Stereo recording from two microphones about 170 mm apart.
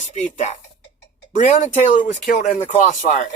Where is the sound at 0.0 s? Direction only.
45° left (ahead or behind).